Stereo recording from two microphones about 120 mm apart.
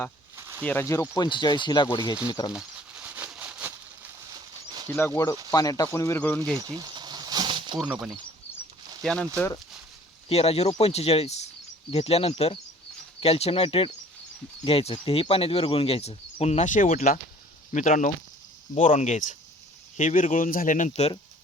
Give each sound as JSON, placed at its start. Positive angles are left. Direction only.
{"t": 0.3, "sound": "a sound", "side_deg": -25}
{"t": 0.6, "sound": "speech", "side_deg": 15}
{"t": 1.1, "sound": "speech", "side_deg": 35}
{"t": 2.6, "sound": "a sound", "side_deg": -10}
{"t": 4.9, "sound": "speech", "side_deg": 20}
{"t": 6.6, "sound": "a sound", "side_deg": -30}
{"t": 7.9, "sound": "speech", "side_deg": -5}
{"t": 9.0, "sound": "speech", "side_deg": 5}
{"t": 10.2, "sound": "speech", "side_deg": 55}